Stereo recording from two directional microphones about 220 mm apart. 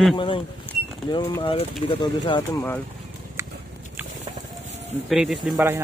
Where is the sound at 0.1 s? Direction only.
20° left (ahead or behind).